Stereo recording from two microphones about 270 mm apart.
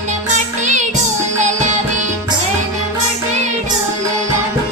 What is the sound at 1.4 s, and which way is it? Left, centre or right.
Music, right.